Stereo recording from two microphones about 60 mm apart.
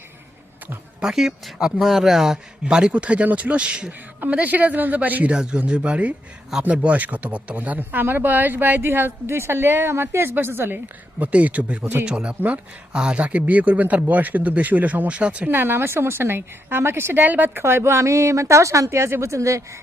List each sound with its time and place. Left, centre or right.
1.0 s speech: centre
4.3 s speech: right
5.3 s speech: centre; by 10.8 s right
11.2 s speech: right
15.4 s a woman's voice: right